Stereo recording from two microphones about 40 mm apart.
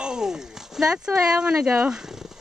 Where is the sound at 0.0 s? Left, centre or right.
Centre.